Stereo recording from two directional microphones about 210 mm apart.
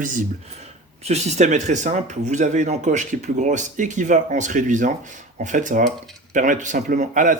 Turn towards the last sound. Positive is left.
turn(degrees=-40)  # may be behind; listen again after turning